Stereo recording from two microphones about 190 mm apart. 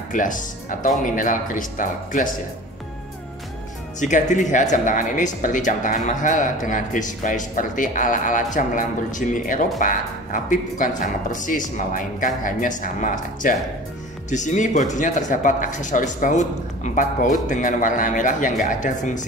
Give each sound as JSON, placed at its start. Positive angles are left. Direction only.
{"t": 0.1, "sound": "speech", "side_deg": 45}
{"t": 4.0, "sound": "speech", "side_deg": 40}